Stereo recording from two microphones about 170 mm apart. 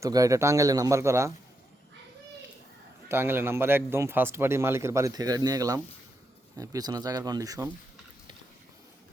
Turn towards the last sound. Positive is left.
turn(degrees=-20)  # may be behind; listen again after turning